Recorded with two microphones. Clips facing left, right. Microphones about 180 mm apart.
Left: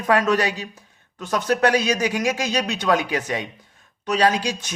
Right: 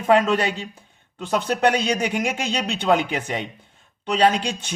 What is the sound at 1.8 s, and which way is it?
Speech, 30° right (ahead or behind).